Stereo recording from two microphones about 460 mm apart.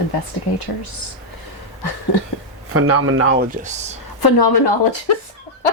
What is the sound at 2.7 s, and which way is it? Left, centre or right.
Speech, right.